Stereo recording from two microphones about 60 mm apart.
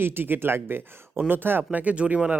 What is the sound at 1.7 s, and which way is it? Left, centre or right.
Speech, right.